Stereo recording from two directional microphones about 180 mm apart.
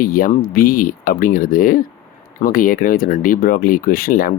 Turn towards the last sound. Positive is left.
turn(degrees=55)  # may be behind; listen again after turning